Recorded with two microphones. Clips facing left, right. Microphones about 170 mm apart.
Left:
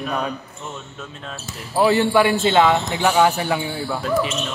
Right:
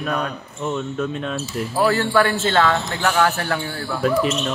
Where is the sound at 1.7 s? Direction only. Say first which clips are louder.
Left 2 dB; 20° left (ahead or behind).